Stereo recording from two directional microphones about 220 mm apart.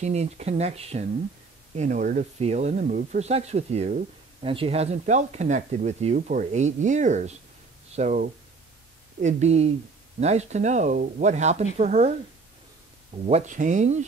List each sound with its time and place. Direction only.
0.0 s speech: 30° right (ahead or behind)
13.3 s speech: 35° right (ahead or behind)